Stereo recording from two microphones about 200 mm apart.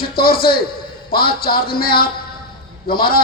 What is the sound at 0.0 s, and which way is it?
A man's voice, 50° left (ahead or behind).